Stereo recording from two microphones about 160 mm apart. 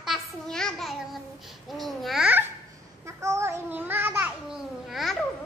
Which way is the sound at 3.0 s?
15° right (ahead or behind).